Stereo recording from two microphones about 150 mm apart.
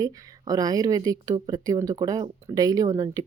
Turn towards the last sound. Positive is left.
turn(degrees=-25)  # may be behind; listen again after turning